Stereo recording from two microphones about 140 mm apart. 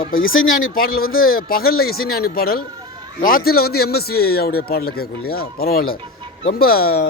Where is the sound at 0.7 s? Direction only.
90° left.